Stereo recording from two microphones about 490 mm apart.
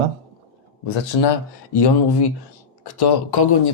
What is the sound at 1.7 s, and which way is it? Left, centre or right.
Speech, left.